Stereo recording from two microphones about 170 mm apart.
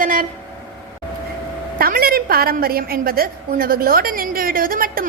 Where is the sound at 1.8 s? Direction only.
60° right (ahead or behind).